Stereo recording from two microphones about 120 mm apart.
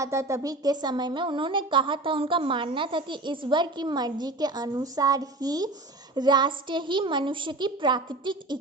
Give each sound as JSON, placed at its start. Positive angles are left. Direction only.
{"t": 0.0, "sound": "speech", "side_deg": -25}